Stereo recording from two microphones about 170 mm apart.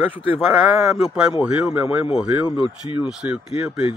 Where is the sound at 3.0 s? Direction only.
5° right (ahead or behind).